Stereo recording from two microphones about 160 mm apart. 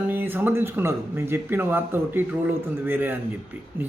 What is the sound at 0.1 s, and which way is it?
Speech, 10° right (ahead or behind).